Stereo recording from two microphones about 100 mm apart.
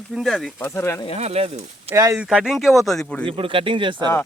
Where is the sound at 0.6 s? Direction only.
25° left (ahead or behind).